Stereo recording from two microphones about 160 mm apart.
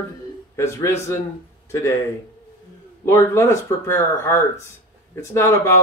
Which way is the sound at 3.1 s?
15° left (ahead or behind).